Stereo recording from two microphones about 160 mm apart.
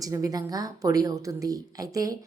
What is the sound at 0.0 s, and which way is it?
A woman's voice, 20° right (ahead or behind).